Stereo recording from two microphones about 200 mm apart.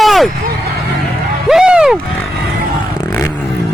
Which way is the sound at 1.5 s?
5° right (ahead or behind).